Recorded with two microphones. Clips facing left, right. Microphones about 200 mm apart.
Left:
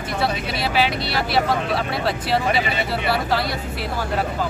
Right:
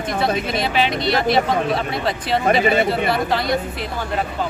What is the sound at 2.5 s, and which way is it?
Speech, 50° right (ahead or behind).